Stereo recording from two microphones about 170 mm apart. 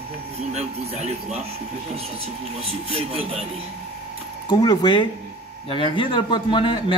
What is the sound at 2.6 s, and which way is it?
Speech, 35° right (ahead or behind).